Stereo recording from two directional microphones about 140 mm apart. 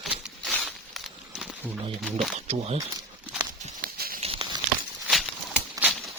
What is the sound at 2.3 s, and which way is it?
Speech, 50° right (ahead or behind).